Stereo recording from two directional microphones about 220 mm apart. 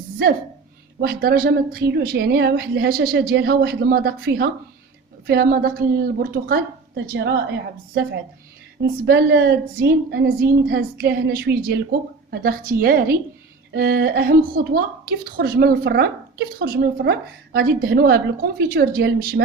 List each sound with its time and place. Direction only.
1.0 s a woman's voice: 45° right (ahead or behind)
9.0 s a woman's voice: 45° right (ahead or behind)